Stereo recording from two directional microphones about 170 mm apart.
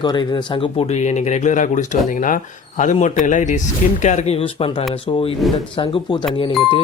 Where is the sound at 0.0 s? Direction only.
25° left (ahead or behind).